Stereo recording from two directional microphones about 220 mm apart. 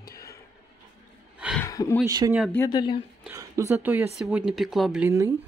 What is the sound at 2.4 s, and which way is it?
Speech, 10° left (ahead or behind).